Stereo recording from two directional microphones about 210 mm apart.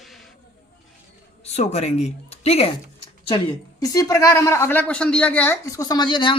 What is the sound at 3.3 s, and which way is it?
A woman's voice, 20° left (ahead or behind).